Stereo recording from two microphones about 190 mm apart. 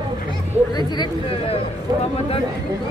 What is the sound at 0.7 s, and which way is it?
Speech, 20° left (ahead or behind).